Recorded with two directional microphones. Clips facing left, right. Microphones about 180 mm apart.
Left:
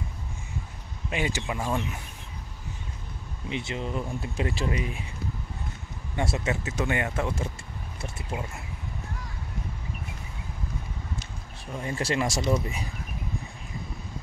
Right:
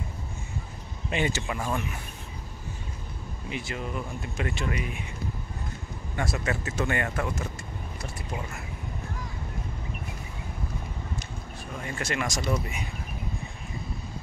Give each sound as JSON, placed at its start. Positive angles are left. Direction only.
{"t": 1.1, "sound": "speech", "side_deg": 10}
{"t": 3.4, "sound": "speech", "side_deg": 25}
{"t": 6.3, "sound": "speech", "side_deg": 20}
{"t": 11.8, "sound": "speech", "side_deg": 30}
{"t": 12.6, "sound": "speech", "side_deg": 35}